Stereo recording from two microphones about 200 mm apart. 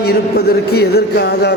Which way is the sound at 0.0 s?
55° left (ahead or behind).